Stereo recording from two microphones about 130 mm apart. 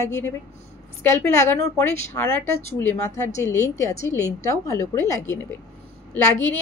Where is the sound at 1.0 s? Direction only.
20° left (ahead or behind).